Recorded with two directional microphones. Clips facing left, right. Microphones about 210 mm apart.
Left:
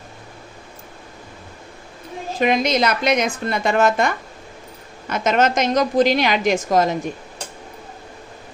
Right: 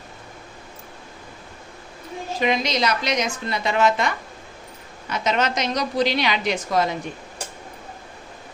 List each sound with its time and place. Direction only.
2.4 s a woman's voice: 50° left (ahead or behind)